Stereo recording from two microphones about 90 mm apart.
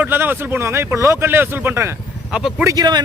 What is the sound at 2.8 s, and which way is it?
Speech, 50° right (ahead or behind).